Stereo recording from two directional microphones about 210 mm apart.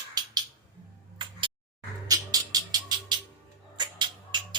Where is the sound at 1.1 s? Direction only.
20° right (ahead or behind).